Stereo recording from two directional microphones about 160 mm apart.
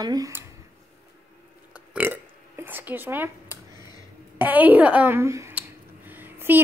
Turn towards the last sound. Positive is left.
turn(degrees=-10)  # may be behind; listen again after turning